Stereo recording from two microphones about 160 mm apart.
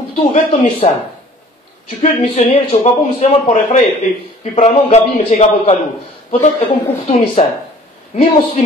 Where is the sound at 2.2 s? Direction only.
35° left (ahead or behind).